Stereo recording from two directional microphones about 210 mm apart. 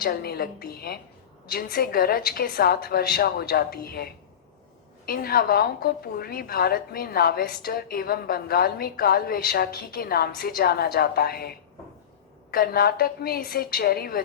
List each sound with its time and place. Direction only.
0.0 s a woman's voice: 45° left (ahead or behind)